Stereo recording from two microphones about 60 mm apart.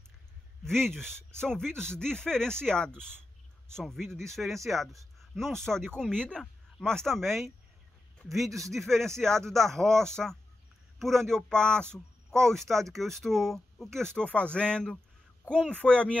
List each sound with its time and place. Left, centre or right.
0.7 s speech: centre